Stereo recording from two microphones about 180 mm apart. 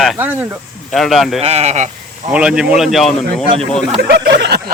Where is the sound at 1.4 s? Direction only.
35° right (ahead or behind).